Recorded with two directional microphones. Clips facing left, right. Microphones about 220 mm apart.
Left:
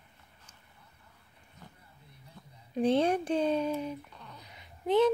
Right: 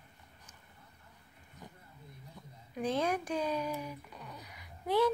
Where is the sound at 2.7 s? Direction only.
30° left (ahead or behind).